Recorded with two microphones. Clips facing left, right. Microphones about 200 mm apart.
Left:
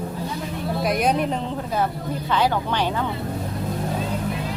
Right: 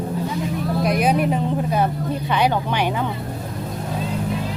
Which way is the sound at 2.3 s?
15° right (ahead or behind).